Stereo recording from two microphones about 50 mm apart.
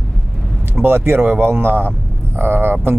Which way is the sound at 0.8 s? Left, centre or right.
Right.